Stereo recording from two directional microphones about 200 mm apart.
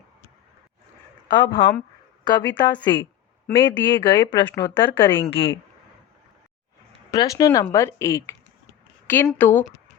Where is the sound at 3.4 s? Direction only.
10° left (ahead or behind).